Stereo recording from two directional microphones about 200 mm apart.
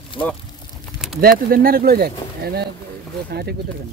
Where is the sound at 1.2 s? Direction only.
50° right (ahead or behind).